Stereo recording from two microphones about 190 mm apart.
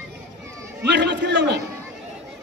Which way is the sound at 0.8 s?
65° right (ahead or behind).